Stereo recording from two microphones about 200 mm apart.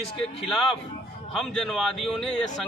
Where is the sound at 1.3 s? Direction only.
5° left (ahead or behind).